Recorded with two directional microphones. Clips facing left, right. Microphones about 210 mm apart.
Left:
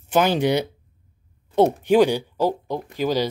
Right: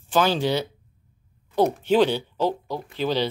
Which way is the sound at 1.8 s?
10° left (ahead or behind).